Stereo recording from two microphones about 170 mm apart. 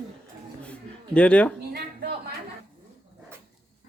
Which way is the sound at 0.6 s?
5° left (ahead or behind).